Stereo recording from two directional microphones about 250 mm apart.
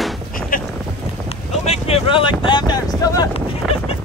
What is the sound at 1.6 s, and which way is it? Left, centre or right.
Vehicle, left.